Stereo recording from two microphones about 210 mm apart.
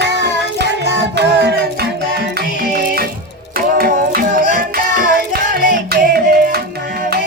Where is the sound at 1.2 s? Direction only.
55° right (ahead or behind).